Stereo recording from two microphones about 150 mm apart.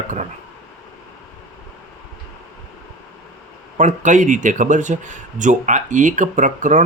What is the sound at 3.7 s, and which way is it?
Speech, 55° right (ahead or behind).